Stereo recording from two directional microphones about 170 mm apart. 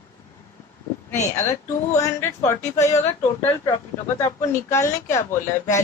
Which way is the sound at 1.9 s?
15° left (ahead or behind).